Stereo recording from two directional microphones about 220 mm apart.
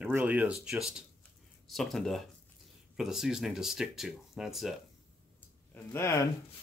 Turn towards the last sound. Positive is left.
turn(degrees=15)  # may be behind; listen again after turning